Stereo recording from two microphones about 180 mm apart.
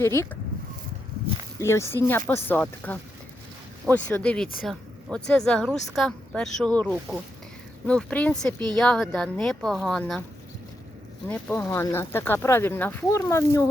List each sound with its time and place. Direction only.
0.0 s speech: 15° left (ahead or behind)
1.5 s speech: 15° left (ahead or behind)
11.3 s speech: 5° left (ahead or behind)